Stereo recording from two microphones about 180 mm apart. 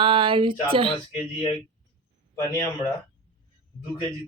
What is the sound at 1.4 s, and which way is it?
A man's voice, 25° left (ahead or behind).